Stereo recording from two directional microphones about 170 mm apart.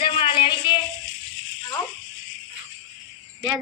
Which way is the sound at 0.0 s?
30° left (ahead or behind).